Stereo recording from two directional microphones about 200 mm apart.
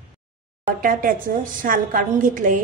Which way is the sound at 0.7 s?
45° right (ahead or behind).